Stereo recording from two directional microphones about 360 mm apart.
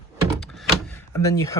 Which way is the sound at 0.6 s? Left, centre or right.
Centre.